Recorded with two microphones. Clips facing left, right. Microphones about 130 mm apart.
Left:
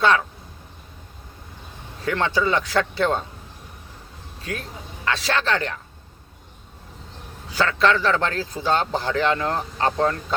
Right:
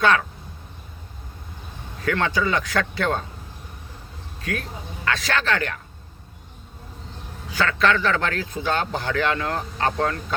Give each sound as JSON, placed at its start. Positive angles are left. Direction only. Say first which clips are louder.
{"t": 0.0, "sound": "speech", "louder": "even", "side_deg": 25}
{"t": 2.0, "sound": "speech", "louder": "left 1 dB", "side_deg": 25}
{"t": 4.5, "sound": "speech", "louder": "right 2 dB", "side_deg": 30}
{"t": 7.5, "sound": "speech", "louder": "left 1 dB", "side_deg": 30}